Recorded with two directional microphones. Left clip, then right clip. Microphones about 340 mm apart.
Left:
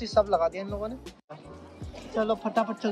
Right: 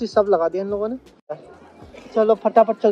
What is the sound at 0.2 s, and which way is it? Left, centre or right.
Speech, right.